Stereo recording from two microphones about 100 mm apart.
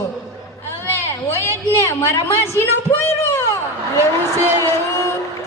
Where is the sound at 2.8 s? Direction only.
25° left (ahead or behind).